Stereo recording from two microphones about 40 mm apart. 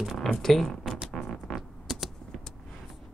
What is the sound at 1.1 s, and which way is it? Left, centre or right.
Music, centre.